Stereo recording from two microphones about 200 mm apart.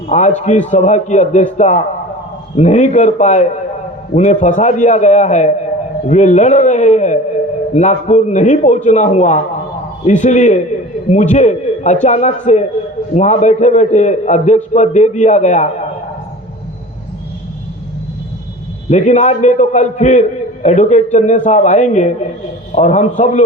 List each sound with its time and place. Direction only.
0.1 s a man's voice: 35° left (ahead or behind)
18.9 s a man's voice: 35° left (ahead or behind)